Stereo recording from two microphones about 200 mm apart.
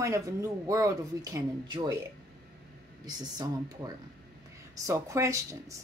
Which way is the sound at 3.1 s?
20° right (ahead or behind).